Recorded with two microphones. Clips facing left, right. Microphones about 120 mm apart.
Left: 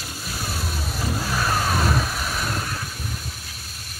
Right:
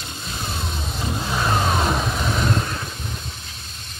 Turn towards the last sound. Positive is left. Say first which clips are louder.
# right 3 dB
turn(degrees=-25)  # may be behind; listen again after turning